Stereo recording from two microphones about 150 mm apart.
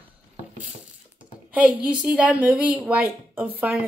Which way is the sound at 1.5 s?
10° right (ahead or behind).